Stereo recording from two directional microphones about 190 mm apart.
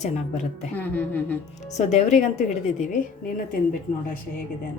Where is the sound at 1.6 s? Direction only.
35° left (ahead or behind).